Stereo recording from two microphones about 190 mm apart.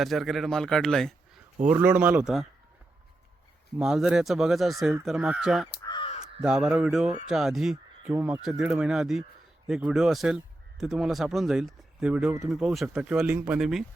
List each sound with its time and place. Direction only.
0.0 s speech: centre (ahead or behind)
1.7 s speech: 10° right (ahead or behind)
3.8 s speech: 5° right (ahead or behind)
5.8 s crow: 25° left (ahead or behind)
6.4 s speech: 5° right (ahead or behind)